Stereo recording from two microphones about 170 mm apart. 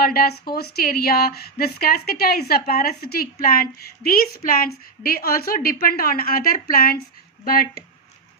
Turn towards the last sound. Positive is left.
turn(degrees=60)  # may be behind; listen again after turning